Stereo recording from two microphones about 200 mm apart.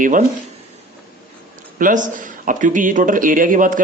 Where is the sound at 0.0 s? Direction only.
40° right (ahead or behind).